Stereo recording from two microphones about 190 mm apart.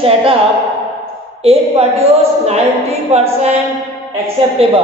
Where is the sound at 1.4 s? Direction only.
30° right (ahead or behind).